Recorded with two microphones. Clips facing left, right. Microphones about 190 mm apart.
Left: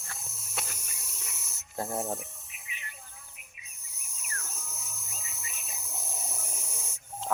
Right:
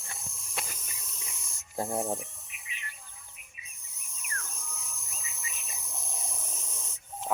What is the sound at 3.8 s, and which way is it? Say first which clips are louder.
Insect: even; 10° left (ahead or behind).